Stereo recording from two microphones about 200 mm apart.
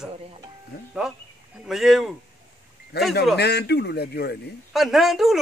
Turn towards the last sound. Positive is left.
turn(degrees=0)  # may be behind; listen again after turning